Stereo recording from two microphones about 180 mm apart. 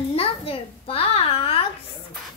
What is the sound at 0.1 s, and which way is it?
Babbling, 30° left (ahead or behind).